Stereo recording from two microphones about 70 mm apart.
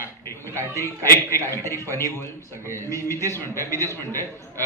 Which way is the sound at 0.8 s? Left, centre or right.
Left.